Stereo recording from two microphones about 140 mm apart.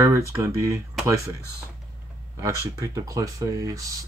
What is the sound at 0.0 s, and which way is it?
Speech, 20° right (ahead or behind).